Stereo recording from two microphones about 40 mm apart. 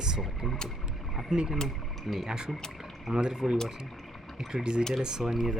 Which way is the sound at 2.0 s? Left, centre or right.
Centre.